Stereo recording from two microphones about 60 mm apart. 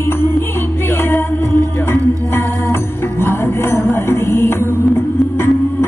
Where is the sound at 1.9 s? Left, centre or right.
Left.